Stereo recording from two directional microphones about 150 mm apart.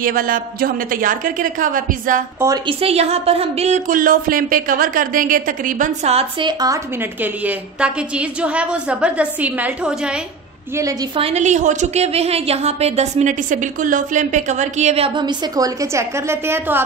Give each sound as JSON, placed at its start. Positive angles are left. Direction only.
{"t": 0.0, "sound": "a woman's voice", "side_deg": -70}
{"t": 2.4, "sound": "speech", "side_deg": -25}
{"t": 2.8, "sound": "speech", "side_deg": -45}
{"t": 6.4, "sound": "speech", "side_deg": -25}
{"t": 7.0, "sound": "a woman's voice", "side_deg": -10}
{"t": 10.8, "sound": "speech", "side_deg": -20}
{"t": 11.1, "sound": "a woman's voice", "side_deg": -45}